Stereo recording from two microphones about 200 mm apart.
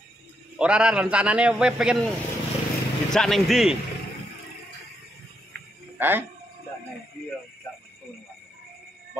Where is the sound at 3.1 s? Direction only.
Centre (ahead or behind).